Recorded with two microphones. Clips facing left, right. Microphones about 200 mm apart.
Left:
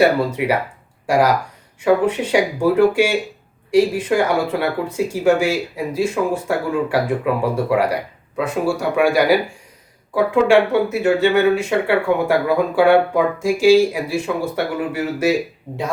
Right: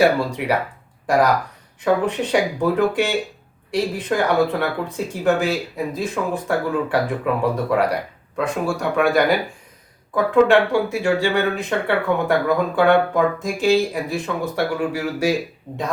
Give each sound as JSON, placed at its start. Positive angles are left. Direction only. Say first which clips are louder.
{"t": 0.0, "sound": "speech", "louder": "left 2 dB", "side_deg": 5}